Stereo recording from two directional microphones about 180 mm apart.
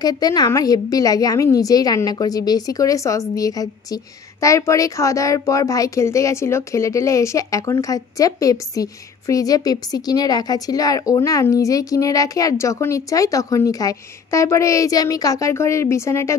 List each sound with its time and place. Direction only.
0.0 s a woman's voice: 20° left (ahead or behind)